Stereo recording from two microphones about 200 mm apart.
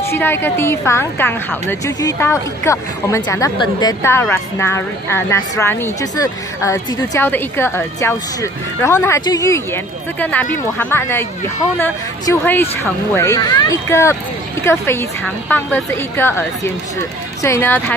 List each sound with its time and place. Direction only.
0.0 s a woman's voice: 10° left (ahead or behind)